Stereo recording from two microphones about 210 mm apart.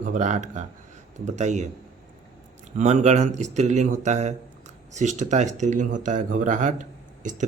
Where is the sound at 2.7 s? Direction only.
30° right (ahead or behind).